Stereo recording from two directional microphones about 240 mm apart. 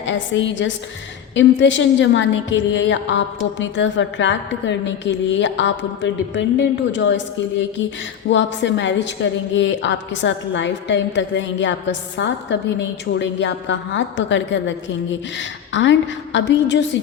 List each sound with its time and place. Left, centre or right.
0.0 s a woman's voice: left
8.3 s a woman's voice: left